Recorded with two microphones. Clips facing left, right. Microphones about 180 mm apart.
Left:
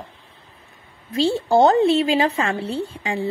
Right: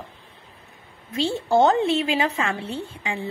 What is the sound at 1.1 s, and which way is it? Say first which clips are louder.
A woman's voice: left 4 dB; 35° left (ahead or behind).